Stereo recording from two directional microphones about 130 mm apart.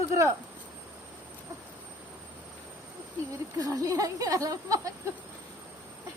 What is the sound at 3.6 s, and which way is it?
Speech, 25° right (ahead or behind).